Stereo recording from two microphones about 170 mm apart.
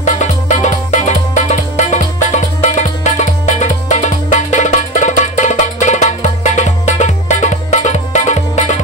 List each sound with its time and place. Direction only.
0.0 s music: 45° left (ahead or behind)